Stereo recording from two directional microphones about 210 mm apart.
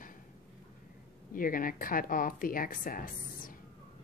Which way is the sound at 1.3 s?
40° left (ahead or behind).